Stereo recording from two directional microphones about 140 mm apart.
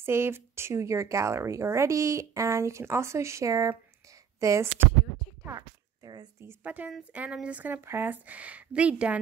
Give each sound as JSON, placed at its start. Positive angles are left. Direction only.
{"t": 0.0, "sound": "speech", "side_deg": -15}
{"t": 5.4, "sound": "a sound", "side_deg": -25}
{"t": 6.4, "sound": "speech", "side_deg": -10}